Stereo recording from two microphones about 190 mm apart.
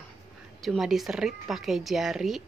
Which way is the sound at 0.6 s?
Centre (ahead or behind).